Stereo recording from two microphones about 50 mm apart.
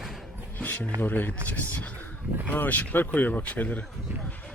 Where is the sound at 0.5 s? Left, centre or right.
Left.